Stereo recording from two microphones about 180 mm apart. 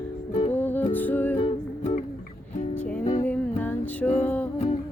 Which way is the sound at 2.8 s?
5° left (ahead or behind).